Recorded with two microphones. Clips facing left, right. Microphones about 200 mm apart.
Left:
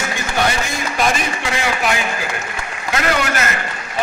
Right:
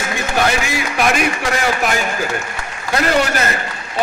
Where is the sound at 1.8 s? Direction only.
45° right (ahead or behind).